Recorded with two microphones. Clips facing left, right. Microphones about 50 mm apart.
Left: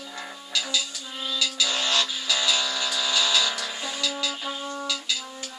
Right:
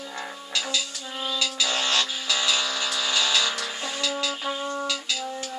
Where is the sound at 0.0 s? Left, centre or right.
Centre.